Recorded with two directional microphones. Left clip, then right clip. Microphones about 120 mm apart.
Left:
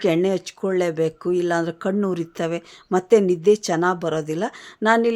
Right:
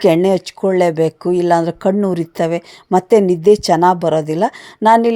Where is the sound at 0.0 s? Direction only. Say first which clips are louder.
Right 8 dB; 45° right (ahead or behind).